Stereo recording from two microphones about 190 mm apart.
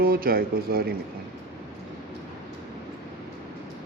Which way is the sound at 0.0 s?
50° right (ahead or behind).